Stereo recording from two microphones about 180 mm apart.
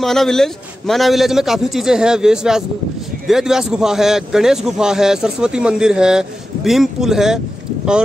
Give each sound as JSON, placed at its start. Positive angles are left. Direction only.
{"t": 0.0, "sound": "a man's voice", "side_deg": 0}